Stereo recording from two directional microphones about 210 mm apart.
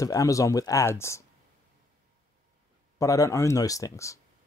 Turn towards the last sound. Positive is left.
turn(degrees=15)  # may be behind; listen again after turning